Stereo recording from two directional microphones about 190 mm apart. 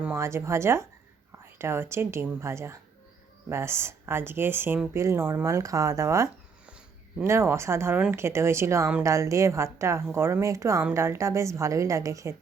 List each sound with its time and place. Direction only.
0.0 s speech: 15° right (ahead or behind)
7.3 s speech: 15° right (ahead or behind)